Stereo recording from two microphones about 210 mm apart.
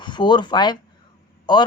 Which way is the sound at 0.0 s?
20° left (ahead or behind).